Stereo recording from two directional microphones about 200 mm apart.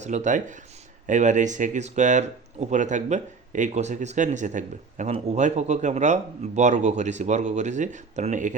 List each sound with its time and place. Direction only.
0.0 s speech: 35° right (ahead or behind)